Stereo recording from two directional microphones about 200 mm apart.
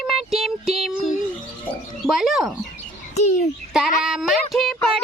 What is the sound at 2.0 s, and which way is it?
Bird, centre (ahead or behind).